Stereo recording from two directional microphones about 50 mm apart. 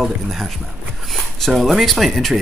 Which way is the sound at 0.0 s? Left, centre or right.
Centre.